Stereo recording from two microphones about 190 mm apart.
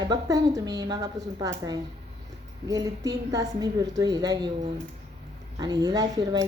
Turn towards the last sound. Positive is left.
turn(degrees=-20)  # may be behind; listen again after turning